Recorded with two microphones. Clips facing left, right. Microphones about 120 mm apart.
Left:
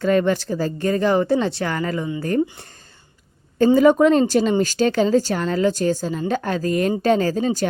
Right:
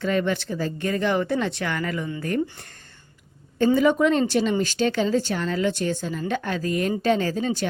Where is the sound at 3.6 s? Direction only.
40° left (ahead or behind).